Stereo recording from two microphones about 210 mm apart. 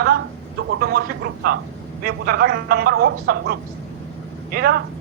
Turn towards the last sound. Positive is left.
turn(degrees=-45)  # may be behind; listen again after turning